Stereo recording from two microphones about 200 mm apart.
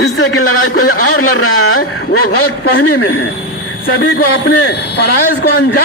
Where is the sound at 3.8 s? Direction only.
55° left (ahead or behind).